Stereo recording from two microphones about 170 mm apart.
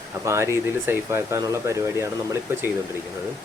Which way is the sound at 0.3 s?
15° right (ahead or behind).